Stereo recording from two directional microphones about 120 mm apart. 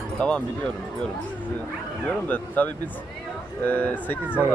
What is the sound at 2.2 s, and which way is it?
Speech, 15° left (ahead or behind).